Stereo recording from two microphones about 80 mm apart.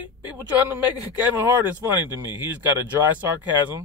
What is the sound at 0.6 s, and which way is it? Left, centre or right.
Speech, right.